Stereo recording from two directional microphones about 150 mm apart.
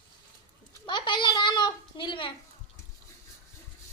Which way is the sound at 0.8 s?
30° left (ahead or behind).